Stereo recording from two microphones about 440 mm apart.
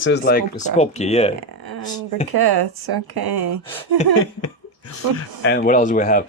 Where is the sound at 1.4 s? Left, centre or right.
Right.